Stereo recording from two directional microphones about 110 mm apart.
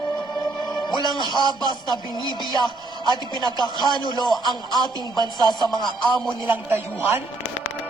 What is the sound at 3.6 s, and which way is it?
Speech, 40° left (ahead or behind).